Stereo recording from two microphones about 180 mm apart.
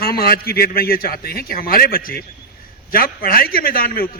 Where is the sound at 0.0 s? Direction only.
60° left (ahead or behind).